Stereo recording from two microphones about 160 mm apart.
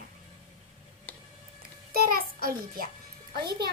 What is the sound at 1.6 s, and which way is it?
Music, 70° right (ahead or behind).